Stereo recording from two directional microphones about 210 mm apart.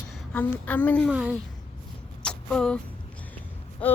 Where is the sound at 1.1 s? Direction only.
5° right (ahead or behind).